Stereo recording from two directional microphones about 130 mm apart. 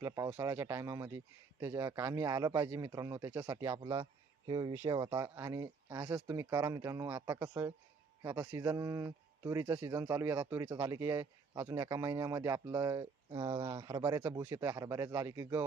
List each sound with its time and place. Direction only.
0.3 s a man's voice: 20° right (ahead or behind)
4.4 s speech: 35° right (ahead or behind)
5.1 s a man's voice: 20° right (ahead or behind)
14.0 s a man's voice: 15° right (ahead or behind)